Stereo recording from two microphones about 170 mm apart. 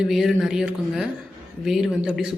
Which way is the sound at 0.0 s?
Centre (ahead or behind).